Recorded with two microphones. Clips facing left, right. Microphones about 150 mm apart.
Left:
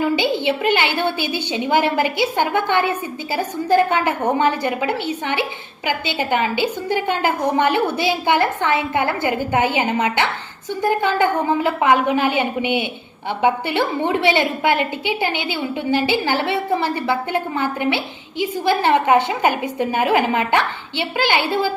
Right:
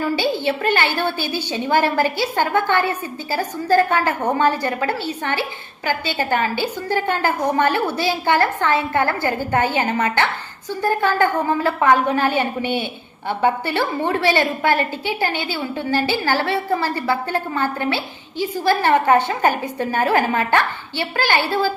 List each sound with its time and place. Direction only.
0.0 s a woman's voice: 20° left (ahead or behind)